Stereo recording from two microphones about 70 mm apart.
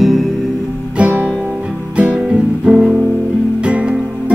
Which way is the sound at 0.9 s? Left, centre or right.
Centre.